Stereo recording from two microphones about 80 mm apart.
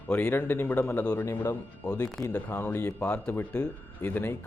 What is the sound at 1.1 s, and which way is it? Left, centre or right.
A man's voice, left.